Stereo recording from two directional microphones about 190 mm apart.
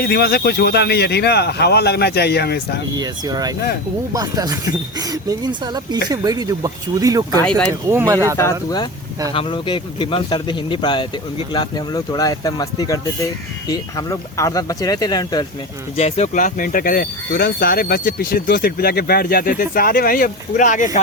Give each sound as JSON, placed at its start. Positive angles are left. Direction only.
{"t": 0.0, "sound": "speech", "side_deg": 55}
{"t": 2.9, "sound": "speech", "side_deg": -20}
{"t": 8.4, "sound": "speech", "side_deg": 15}
{"t": 9.3, "sound": "speech", "side_deg": 30}
{"t": 16.0, "sound": "speech", "side_deg": 35}